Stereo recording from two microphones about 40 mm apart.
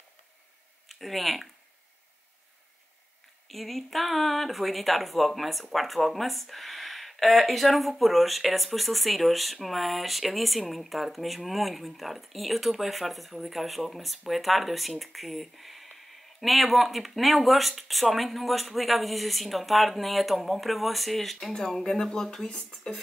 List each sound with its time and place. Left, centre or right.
0.8 s speech: centre
3.4 s speech: centre